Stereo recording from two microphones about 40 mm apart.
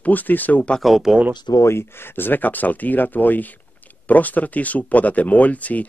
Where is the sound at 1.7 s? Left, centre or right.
Left.